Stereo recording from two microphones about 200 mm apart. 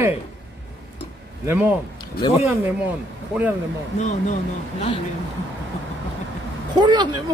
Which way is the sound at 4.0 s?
40° left (ahead or behind).